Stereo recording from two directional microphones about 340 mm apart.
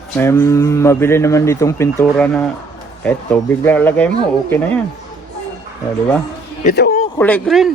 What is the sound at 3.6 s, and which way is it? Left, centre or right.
Speech, centre.